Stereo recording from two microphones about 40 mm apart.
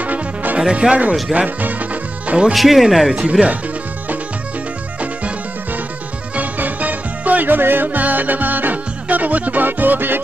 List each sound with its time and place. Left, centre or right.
0.0 s music: right
0.6 s speech: right
1.3 s music: right
2.5 s speech: centre
3.2 s speech: right
6.3 s music: right